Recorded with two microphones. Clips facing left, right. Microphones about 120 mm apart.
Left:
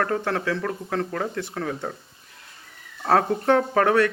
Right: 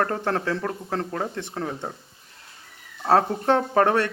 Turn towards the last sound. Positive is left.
turn(degrees=-30)  # may be behind; listen again after turning